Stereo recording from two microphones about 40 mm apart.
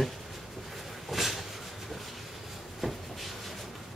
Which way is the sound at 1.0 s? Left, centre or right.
Centre.